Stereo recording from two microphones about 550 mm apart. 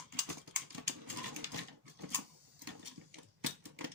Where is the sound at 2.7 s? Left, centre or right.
Right.